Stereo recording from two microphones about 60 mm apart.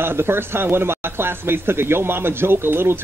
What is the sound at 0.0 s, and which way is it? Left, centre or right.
Speech, right.